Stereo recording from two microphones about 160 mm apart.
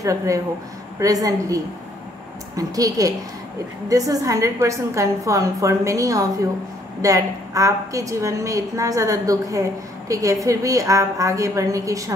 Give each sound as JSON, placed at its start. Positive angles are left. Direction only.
{"t": 0.0, "sound": "a woman's voice", "side_deg": -20}